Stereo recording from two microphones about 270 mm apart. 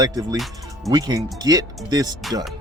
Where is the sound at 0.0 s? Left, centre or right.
Centre.